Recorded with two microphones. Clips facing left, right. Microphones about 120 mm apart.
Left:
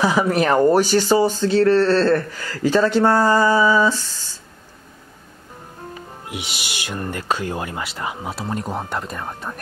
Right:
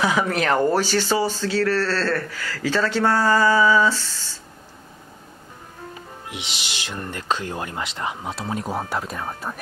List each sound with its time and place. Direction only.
0.0 s speech: 15° left (ahead or behind)
6.2 s speech: 10° left (ahead or behind)